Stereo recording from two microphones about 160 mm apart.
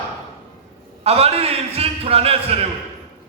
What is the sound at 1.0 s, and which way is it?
A man's voice, 40° right (ahead or behind).